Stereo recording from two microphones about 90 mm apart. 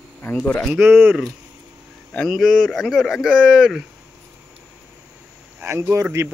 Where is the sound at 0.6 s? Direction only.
5° right (ahead or behind).